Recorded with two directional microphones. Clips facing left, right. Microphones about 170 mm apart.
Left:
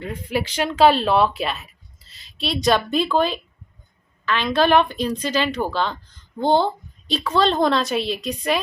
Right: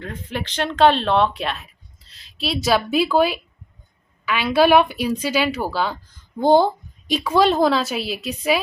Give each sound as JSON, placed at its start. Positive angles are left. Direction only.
{"t": 0.0, "sound": "a woman's voice", "side_deg": 10}